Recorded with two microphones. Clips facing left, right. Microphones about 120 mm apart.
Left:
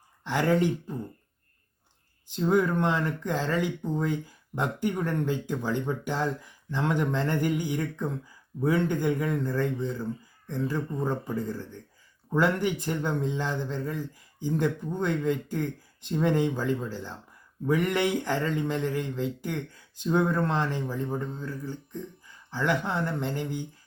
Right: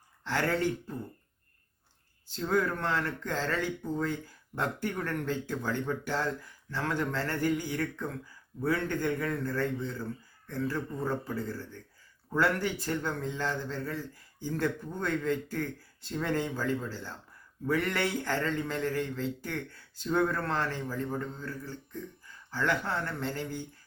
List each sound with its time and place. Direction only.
0.3 s speech: 15° left (ahead or behind)
2.2 s speech: 15° left (ahead or behind)